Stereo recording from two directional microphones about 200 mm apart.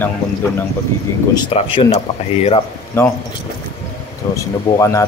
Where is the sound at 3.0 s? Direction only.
15° left (ahead or behind).